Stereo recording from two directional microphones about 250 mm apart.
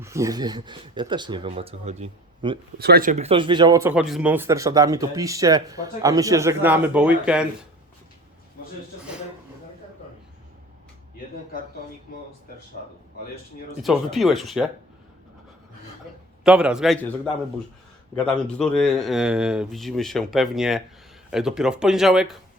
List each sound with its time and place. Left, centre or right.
0.0 s speech: centre
2.7 s speech: right; by 7.4 s centre
13.8 s speech: centre
16.4 s speech: centre
18.3 s speech: centre